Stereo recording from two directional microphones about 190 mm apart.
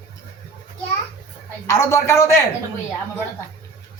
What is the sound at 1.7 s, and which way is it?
Speech, 15° left (ahead or behind).